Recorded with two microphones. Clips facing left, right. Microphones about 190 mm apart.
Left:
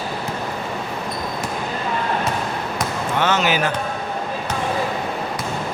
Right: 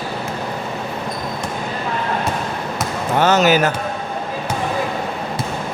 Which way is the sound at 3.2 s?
40° right (ahead or behind).